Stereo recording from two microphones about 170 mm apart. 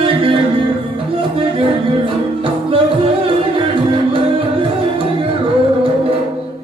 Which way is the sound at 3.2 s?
30° right (ahead or behind).